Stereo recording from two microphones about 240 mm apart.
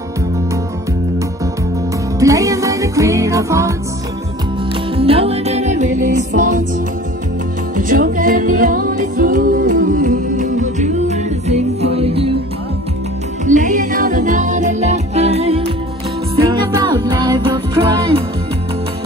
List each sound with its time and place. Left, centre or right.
2.1 s music: centre
4.9 s music: right
7.7 s music: right
13.5 s music: right; by 17.9 s centre